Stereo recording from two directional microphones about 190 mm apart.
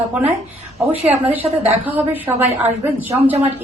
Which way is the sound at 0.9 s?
30° right (ahead or behind).